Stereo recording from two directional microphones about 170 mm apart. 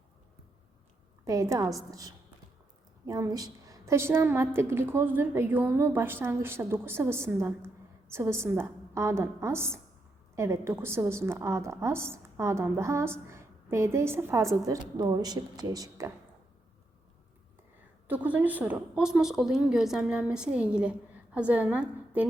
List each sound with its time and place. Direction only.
1.2 s a woman's voice: 20° right (ahead or behind)
18.1 s a woman's voice: 10° right (ahead or behind)